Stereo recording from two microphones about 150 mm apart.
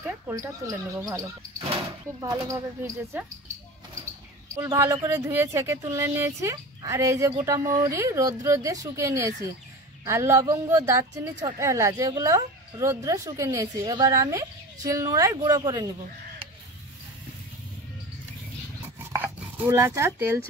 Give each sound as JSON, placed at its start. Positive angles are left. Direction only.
{"t": 0.0, "sound": "a woman's voice", "side_deg": -20}
{"t": 4.6, "sound": "a woman's voice", "side_deg": -20}
{"t": 19.1, "sound": "dog", "side_deg": -15}